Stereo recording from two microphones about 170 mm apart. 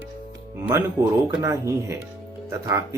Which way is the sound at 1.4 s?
20° right (ahead or behind).